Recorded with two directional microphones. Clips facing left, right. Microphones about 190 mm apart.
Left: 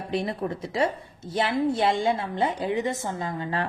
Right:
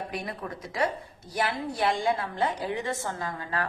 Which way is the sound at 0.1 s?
25° left (ahead or behind).